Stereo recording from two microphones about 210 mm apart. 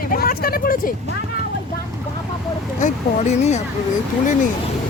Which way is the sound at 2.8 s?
35° left (ahead or behind).